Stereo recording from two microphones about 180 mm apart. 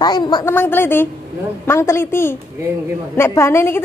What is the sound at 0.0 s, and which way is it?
Speech, 25° left (ahead or behind).